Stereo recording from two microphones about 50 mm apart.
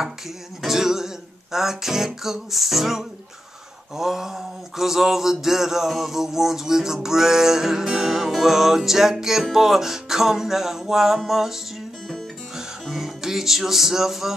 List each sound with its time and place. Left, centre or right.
0.6 s music: centre
3.9 s a sound: centre
12.5 s music: centre